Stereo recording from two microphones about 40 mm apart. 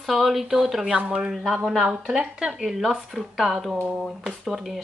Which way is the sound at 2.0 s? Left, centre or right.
Centre.